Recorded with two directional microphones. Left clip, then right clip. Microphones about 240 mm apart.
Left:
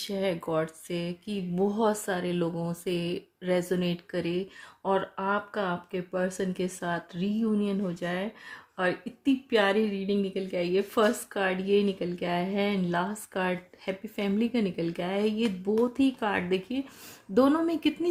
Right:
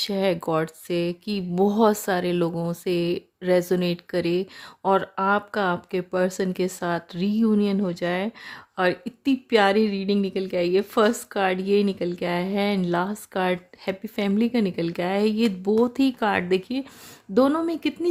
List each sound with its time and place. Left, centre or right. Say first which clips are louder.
0.1 s a woman's voice: right 3 dB; right